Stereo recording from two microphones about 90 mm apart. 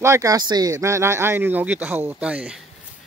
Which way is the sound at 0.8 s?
30° right (ahead or behind).